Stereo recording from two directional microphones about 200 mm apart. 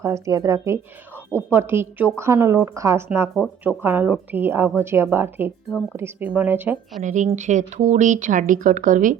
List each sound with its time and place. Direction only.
0.0 s a woman's voice: 15° right (ahead or behind)
1.1 s a sound: 10° left (ahead or behind)
1.5 s a woman's voice: 10° right (ahead or behind)
7.0 s speech: 40° right (ahead or behind)